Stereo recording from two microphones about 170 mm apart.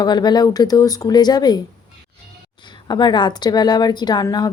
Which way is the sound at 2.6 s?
25° left (ahead or behind).